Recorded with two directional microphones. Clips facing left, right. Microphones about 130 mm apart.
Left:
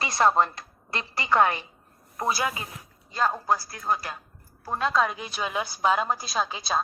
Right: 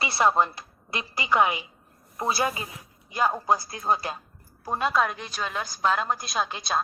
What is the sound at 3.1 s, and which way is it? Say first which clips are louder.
Speech: right 1 dB; 10° right (ahead or behind).